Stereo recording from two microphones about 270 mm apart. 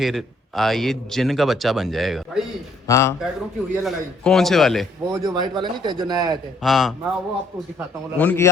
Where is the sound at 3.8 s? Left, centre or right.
Centre.